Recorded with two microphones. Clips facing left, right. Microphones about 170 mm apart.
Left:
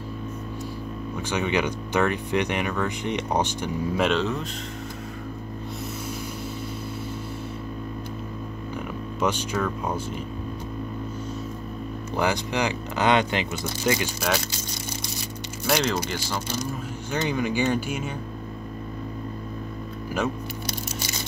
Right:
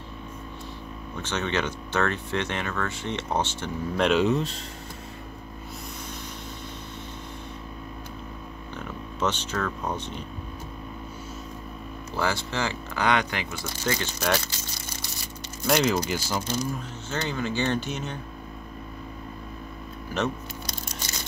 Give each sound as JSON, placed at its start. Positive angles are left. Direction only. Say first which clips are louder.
{"t": 1.1, "sound": "speech", "louder": "left 3 dB", "side_deg": 10}
{"t": 8.7, "sound": "speech", "louder": "left 3 dB", "side_deg": 10}
{"t": 12.2, "sound": "speech", "louder": "left 3 dB", "side_deg": 15}
{"t": 15.6, "sound": "speech", "louder": "right 1 dB", "side_deg": 0}
{"t": 17.1, "sound": "speech", "louder": "left 4 dB", "side_deg": 15}